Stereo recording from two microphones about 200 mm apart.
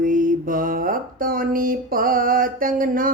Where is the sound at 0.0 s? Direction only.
45° right (ahead or behind).